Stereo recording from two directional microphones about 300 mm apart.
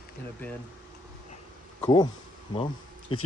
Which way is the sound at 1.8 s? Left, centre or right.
Centre.